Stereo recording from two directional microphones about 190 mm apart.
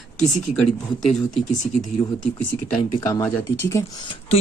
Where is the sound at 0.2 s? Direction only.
Centre (ahead or behind).